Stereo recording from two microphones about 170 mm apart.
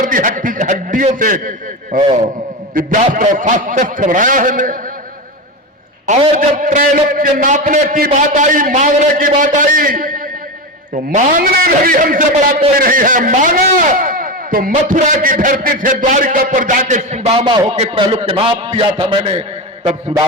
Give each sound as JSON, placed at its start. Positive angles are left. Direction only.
{"t": 0.0, "sound": "a man's voice", "side_deg": -55}
{"t": 6.6, "sound": "a man's voice", "side_deg": -55}
{"t": 14.0, "sound": "a sound", "side_deg": -55}
{"t": 14.8, "sound": "a man's voice", "side_deg": -50}